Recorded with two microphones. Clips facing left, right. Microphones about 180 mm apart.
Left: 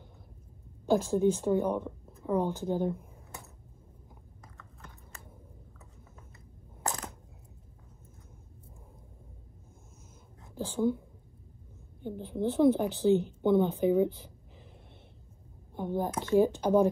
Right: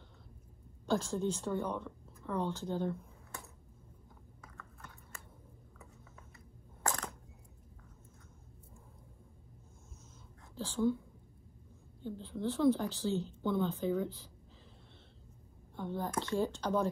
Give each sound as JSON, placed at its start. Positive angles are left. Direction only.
{"t": 0.8, "sound": "a woman's voice", "side_deg": 15}
{"t": 10.6, "sound": "speech", "side_deg": 20}
{"t": 12.0, "sound": "a woman's voice", "side_deg": 15}
{"t": 14.0, "sound": "a woman's voice", "side_deg": 60}
{"t": 15.7, "sound": "a woman's voice", "side_deg": 15}